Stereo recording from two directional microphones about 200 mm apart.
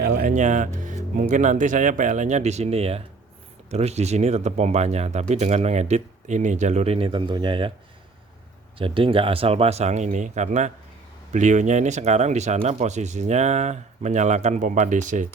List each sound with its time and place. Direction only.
0.0 s speech: 50° right (ahead or behind); by 7.7 s 25° right (ahead or behind)
8.8 s speech: 25° right (ahead or behind)